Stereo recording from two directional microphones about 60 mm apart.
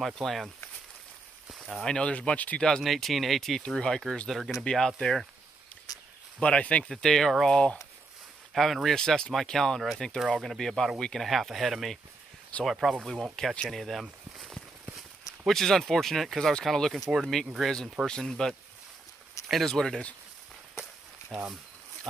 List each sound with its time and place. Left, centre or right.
0.0 s speech: centre
1.5 s a sound: centre
1.9 s speech: centre
2.6 s speech: centre
4.6 s speech: centre
6.4 s speech: centre
14.4 s a sound: centre
16.6 s speech: centre